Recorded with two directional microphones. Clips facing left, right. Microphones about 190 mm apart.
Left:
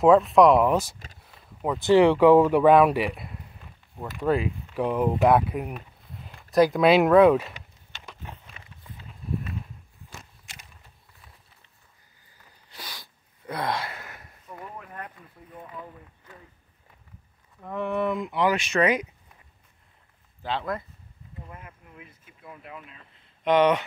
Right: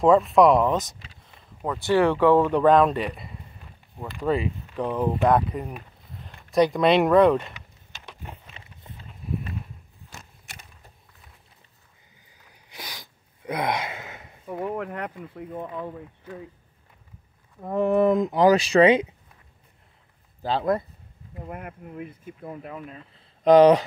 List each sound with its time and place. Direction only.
0.0 s speech: centre (ahead or behind)
1.2 s a sound: 10° left (ahead or behind)
1.9 s speech: 15° left (ahead or behind)
8.6 s walk: 30° right (ahead or behind)
12.7 s a sound: 15° right (ahead or behind)
14.5 s speech: 90° right
17.6 s speech: 40° right (ahead or behind)
20.4 s speech: 40° right (ahead or behind)
21.5 s speech: 60° right (ahead or behind)
21.8 s speech: 50° right (ahead or behind)